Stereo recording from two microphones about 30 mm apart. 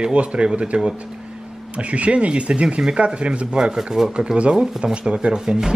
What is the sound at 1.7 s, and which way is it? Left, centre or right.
Speech, right.